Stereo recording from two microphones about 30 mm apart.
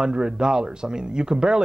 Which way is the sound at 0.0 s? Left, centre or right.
Right.